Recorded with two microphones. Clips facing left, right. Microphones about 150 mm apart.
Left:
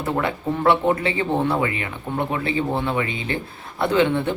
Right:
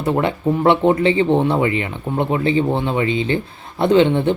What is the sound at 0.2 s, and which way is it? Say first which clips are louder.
Speech: right 5 dB; 20° right (ahead or behind).